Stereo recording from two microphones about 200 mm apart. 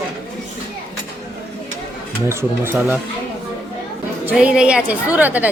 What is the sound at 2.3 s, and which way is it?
Speech, 10° right (ahead or behind).